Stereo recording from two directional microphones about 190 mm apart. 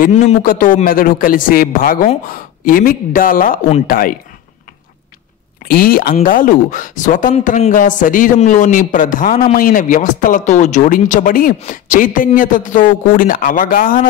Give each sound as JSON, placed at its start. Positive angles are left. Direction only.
{"t": 0.0, "sound": "speech", "side_deg": 45}
{"t": 5.7, "sound": "speech", "side_deg": 50}